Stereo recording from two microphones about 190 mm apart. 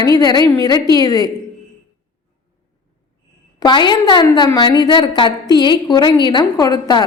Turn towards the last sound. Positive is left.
turn(degrees=20)  # may be behind; listen again after turning